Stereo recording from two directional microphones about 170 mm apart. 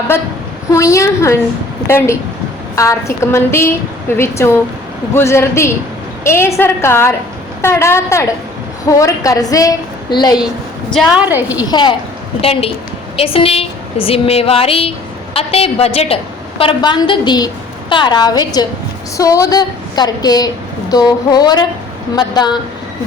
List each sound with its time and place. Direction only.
0.7 s a woman's voice: 20° left (ahead or behind)
10.9 s a woman's voice: 10° right (ahead or behind)
11.6 s a woman's voice: 25° left (ahead or behind)